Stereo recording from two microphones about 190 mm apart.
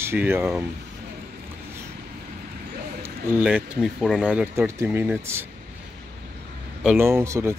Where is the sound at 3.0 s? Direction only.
5° right (ahead or behind).